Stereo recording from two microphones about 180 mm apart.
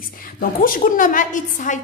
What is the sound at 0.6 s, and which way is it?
A woman's voice, 50° left (ahead or behind).